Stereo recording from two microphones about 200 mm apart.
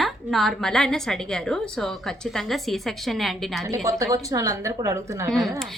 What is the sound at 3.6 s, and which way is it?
A woman's voice, 15° right (ahead or behind).